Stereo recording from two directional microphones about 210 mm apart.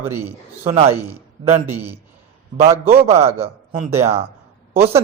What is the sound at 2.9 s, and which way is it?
Speech, 30° right (ahead or behind).